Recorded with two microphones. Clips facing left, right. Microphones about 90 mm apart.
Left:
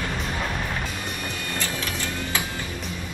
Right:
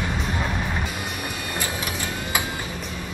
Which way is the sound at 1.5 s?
15° right (ahead or behind).